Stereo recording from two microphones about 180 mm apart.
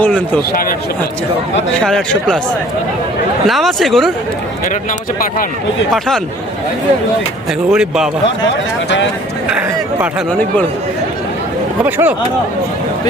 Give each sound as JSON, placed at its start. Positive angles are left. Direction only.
{"t": 0.0, "sound": "speech", "side_deg": 10}
{"t": 0.5, "sound": "speech", "side_deg": 55}
{"t": 1.7, "sound": "speech", "side_deg": 5}
{"t": 3.4, "sound": "speech", "side_deg": 0}
{"t": 4.6, "sound": "speech", "side_deg": 50}
{"t": 5.9, "sound": "speech", "side_deg": 0}
{"t": 7.7, "sound": "speech", "side_deg": -5}
{"t": 9.5, "sound": "a sound", "side_deg": -5}
{"t": 11.8, "sound": "speech", "side_deg": -10}